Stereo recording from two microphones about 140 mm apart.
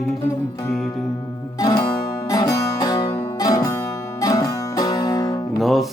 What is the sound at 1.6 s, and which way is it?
Music, 25° left (ahead or behind).